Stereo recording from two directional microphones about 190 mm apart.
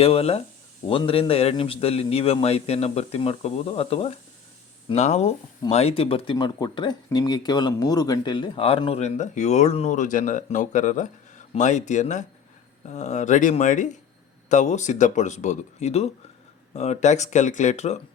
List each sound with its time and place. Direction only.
0.0 s a man's voice: 30° left (ahead or behind)